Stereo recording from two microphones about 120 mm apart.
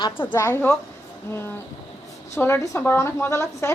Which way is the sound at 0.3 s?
20° left (ahead or behind).